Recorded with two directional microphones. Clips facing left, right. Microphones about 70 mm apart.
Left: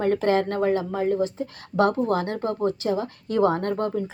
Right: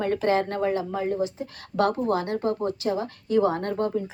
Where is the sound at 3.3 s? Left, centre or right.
Left.